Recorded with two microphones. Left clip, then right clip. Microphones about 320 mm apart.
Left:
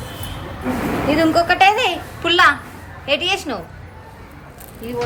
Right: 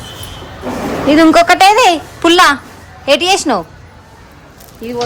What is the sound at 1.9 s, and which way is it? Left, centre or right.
Speech, centre.